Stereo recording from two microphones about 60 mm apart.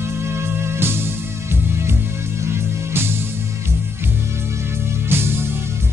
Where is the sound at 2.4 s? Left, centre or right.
Right.